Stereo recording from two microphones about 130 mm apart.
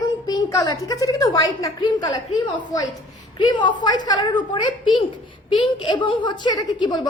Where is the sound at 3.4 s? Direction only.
35° left (ahead or behind).